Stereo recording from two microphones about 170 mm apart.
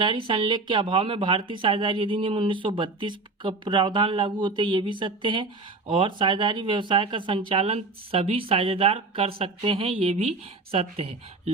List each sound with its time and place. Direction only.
0.0 s a woman's voice: 30° right (ahead or behind)